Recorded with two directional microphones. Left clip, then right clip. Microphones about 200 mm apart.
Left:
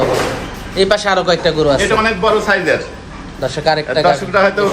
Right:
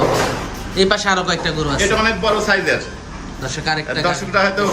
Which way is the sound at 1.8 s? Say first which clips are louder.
Left 3 dB; 15° left (ahead or behind).